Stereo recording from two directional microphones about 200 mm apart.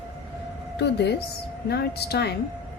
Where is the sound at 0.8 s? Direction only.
55° left (ahead or behind).